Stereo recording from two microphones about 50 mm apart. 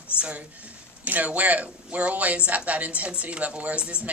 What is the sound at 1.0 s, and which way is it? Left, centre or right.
A woman's voice, right.